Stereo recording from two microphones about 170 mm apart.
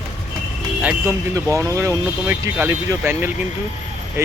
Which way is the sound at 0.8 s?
10° right (ahead or behind).